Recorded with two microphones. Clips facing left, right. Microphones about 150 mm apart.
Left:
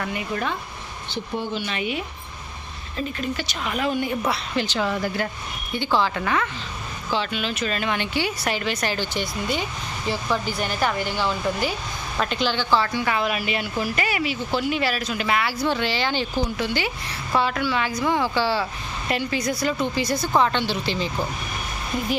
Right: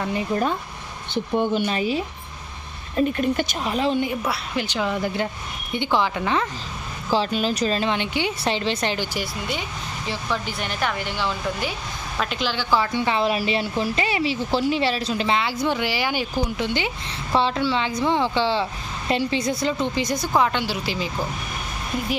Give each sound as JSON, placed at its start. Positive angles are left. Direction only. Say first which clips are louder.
{"t": 0.1, "sound": "speech", "louder": "right 4 dB", "side_deg": -30}
{"t": 1.1, "sound": "speech", "louder": "right 6 dB", "side_deg": -50}
{"t": 3.0, "sound": "speech", "louder": "right 7 dB", "side_deg": -50}
{"t": 3.6, "sound": "speech", "louder": "right 1 dB", "side_deg": -30}
{"t": 4.3, "sound": "speech", "louder": "left 1 dB", "side_deg": -10}
{"t": 7.1, "sound": "a woman's voice", "louder": "right 4 dB", "side_deg": -40}
{"t": 12.7, "sound": "speech", "louder": "right 2 dB", "side_deg": -20}